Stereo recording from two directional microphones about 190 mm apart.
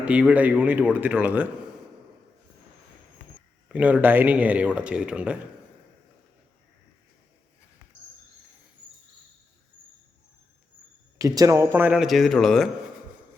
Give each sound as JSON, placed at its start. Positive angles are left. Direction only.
{"t": 0.0, "sound": "speech", "side_deg": -5}
{"t": 3.7, "sound": "speech", "side_deg": -5}
{"t": 11.2, "sound": "speech", "side_deg": -15}